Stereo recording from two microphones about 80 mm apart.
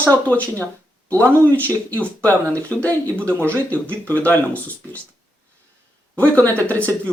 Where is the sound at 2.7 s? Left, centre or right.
Centre.